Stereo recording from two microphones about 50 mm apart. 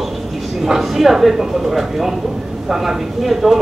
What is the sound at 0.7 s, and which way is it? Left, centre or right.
Speech, centre.